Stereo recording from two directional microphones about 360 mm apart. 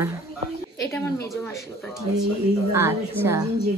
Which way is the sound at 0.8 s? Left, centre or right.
Centre.